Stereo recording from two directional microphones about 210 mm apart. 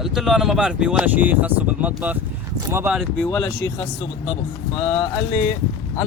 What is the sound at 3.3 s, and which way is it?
Speech, 15° left (ahead or behind).